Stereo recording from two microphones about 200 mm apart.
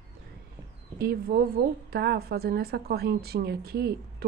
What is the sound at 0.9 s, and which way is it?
A woman's voice, 50° right (ahead or behind).